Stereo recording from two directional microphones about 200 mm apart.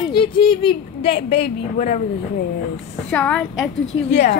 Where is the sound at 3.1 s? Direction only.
5° left (ahead or behind).